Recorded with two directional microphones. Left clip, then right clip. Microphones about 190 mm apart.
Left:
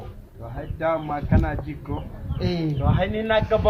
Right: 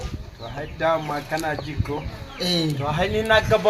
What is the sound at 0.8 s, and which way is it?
Speech, 15° right (ahead or behind).